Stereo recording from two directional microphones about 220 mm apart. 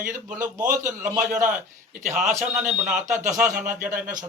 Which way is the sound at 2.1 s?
35° right (ahead or behind).